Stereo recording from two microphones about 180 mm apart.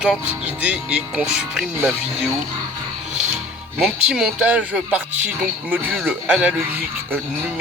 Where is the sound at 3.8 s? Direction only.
5° right (ahead or behind).